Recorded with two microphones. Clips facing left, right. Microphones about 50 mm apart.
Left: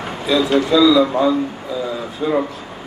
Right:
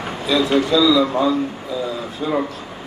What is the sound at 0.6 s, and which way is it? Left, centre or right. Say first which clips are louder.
Speech: left 3 dB; left.